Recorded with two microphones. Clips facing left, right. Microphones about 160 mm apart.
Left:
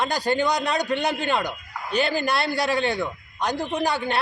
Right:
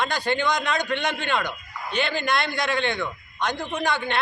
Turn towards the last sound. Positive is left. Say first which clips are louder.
# left 2 dB
turn(degrees=35)  # may be behind; listen again after turning